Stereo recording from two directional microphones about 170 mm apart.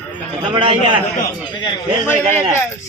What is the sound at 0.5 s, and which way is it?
Speech, 30° right (ahead or behind).